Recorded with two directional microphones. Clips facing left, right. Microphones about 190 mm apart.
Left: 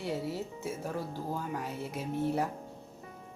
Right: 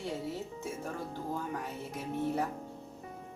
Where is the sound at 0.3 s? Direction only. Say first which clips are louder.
Left 2 dB; 10° left (ahead or behind).